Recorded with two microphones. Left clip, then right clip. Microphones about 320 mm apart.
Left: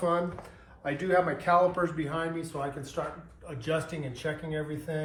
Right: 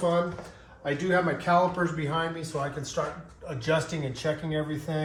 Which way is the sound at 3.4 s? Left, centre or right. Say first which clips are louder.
Right 4 dB; centre.